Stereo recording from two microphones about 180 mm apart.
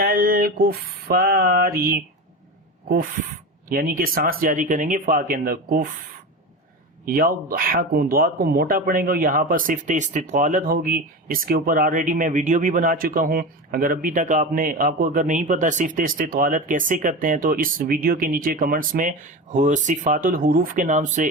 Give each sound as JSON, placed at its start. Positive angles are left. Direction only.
{"t": 0.0, "sound": "a sound", "side_deg": -55}
{"t": 3.7, "sound": "speech", "side_deg": -55}
{"t": 7.0, "sound": "speech", "side_deg": -50}